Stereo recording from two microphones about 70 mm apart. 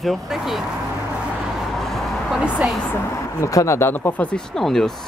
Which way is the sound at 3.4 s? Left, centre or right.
Left.